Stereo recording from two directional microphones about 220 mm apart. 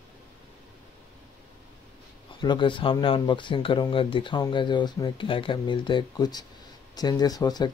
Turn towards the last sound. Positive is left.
turn(degrees=15)  # may be behind; listen again after turning